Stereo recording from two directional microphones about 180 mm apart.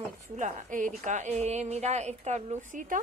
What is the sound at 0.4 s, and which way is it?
A woman's voice, 45° right (ahead or behind).